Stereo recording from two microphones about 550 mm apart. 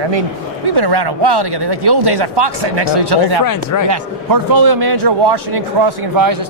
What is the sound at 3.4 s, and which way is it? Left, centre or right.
Speech, left.